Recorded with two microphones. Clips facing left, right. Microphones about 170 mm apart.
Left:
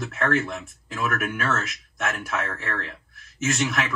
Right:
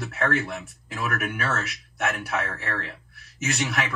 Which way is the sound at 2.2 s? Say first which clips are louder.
Even; 35° right (ahead or behind).